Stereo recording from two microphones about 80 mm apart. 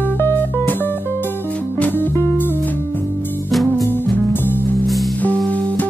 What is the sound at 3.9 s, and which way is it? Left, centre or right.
Music, left.